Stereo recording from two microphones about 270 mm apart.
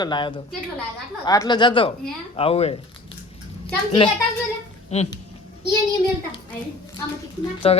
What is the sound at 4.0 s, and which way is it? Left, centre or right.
Speech, centre.